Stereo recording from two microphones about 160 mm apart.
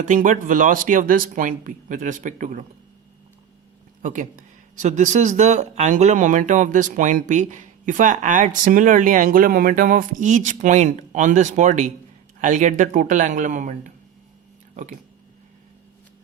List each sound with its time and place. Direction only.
0.0 s speech: 55° right (ahead or behind)
4.0 s speech: 50° right (ahead or behind)